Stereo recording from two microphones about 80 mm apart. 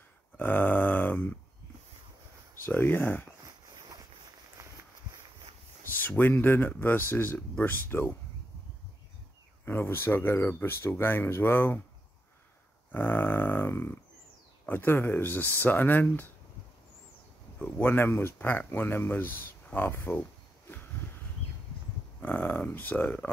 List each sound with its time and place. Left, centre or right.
0.4 s grunt: left
2.6 s speech: left
5.9 s speech: left
9.7 s speech: left
12.9 s speech: left
17.6 s speech: left
22.2 s speech: left